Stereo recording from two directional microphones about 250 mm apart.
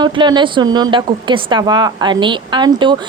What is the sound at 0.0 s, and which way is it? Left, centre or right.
A woman's voice, centre.